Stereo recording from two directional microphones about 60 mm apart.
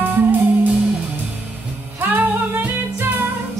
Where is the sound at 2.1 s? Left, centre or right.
Right.